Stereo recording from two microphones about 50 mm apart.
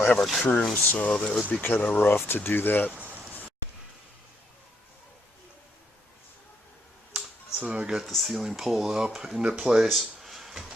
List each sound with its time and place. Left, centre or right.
0.2 s speech: centre
0.9 s speech: left
2.0 s speech: left
2.9 s a sound: right
7.6 s speech: right
7.9 s speech: centre